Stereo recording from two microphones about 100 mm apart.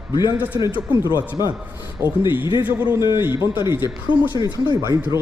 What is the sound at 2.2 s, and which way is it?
A man's voice, 55° left (ahead or behind).